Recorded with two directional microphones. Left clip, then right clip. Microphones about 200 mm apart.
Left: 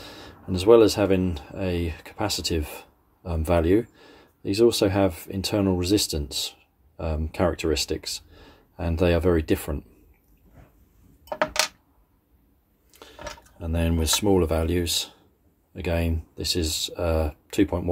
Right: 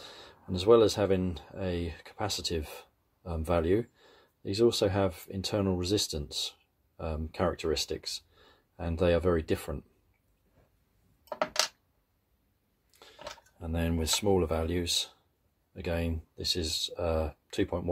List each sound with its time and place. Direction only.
0.0 s speech: centre (ahead or behind)
13.0 s speech: 5° right (ahead or behind)